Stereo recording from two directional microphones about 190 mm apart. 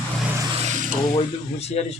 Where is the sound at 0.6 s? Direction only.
40° right (ahead or behind).